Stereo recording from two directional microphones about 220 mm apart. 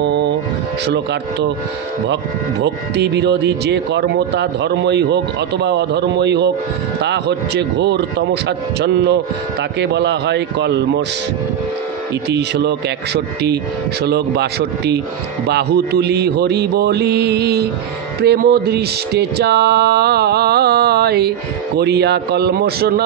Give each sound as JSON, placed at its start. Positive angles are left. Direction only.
{"t": 0.0, "sound": "a sound", "side_deg": -50}
{"t": 2.6, "sound": "speech", "side_deg": -50}
{"t": 12.3, "sound": "speech", "side_deg": -50}